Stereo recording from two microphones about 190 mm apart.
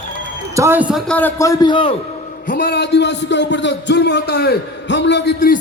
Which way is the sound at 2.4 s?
45° left (ahead or behind).